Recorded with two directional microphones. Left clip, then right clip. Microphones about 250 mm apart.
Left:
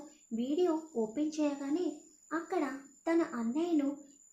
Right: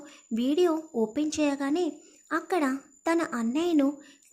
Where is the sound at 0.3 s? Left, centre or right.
Right.